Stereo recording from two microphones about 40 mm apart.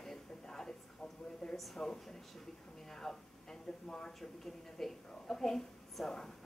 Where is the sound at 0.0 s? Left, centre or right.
Centre.